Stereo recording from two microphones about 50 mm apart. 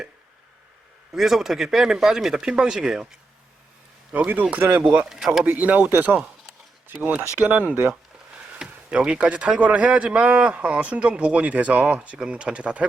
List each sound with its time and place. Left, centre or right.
1.1 s speech: centre
4.1 s speech: right
5.0 s speech: centre
5.5 s speech: right
8.5 s speech: centre